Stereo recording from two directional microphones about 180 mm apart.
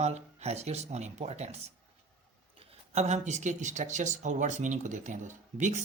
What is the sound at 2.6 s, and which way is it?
Speech, 35° right (ahead or behind).